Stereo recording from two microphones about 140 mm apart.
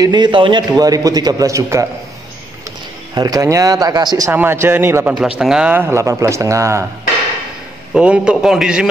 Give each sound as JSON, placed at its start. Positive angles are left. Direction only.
{"t": 0.0, "sound": "a man's voice", "side_deg": -30}
{"t": 3.2, "sound": "a man's voice", "side_deg": -25}
{"t": 4.3, "sound": "a man's voice", "side_deg": -15}
{"t": 7.9, "sound": "a man's voice", "side_deg": -5}